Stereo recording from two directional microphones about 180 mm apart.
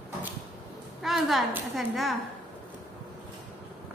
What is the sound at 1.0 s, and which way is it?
A woman's voice, centre (ahead or behind).